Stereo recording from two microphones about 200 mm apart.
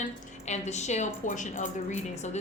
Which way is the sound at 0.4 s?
35° left (ahead or behind).